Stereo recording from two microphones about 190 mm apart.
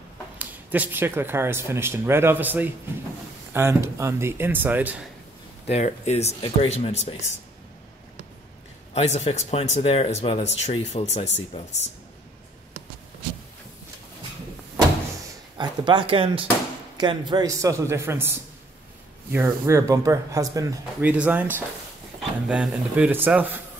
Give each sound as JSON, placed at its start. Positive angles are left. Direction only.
{"t": 0.4, "sound": "speech", "side_deg": -10}
{"t": 5.7, "sound": "speech", "side_deg": 35}
{"t": 8.9, "sound": "speech", "side_deg": 35}
{"t": 15.5, "sound": "speech", "side_deg": -25}
{"t": 19.3, "sound": "speech", "side_deg": -10}